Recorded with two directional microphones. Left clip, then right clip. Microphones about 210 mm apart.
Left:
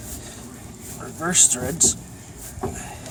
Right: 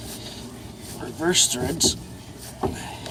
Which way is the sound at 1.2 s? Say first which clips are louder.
Even; 45° left (ahead or behind).